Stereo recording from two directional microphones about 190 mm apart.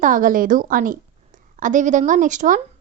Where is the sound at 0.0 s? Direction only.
45° right (ahead or behind).